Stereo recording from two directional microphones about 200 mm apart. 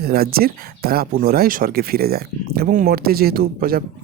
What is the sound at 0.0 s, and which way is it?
Speech, 50° right (ahead or behind).